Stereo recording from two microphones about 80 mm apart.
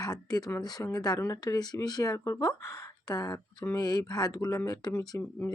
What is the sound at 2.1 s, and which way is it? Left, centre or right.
Speech, left.